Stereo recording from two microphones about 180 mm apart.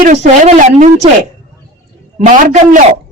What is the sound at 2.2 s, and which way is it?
Speech, 45° right (ahead or behind).